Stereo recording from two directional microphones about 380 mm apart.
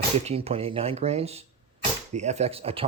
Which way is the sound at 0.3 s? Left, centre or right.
Centre.